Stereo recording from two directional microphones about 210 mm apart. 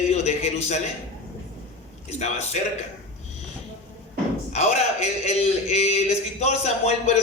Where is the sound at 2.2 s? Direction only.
30° left (ahead or behind).